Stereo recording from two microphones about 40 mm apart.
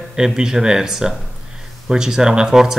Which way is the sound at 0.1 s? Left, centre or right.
Centre.